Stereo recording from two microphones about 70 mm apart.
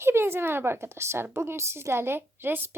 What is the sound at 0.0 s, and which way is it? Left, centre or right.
Speech, right.